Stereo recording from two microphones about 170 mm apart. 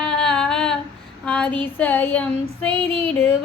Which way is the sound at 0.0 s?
5° left (ahead or behind).